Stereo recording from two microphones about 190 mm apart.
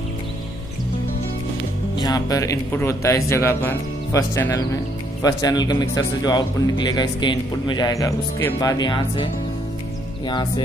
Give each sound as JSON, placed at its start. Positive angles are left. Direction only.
{"t": 2.0, "sound": "a man's voice", "side_deg": 20}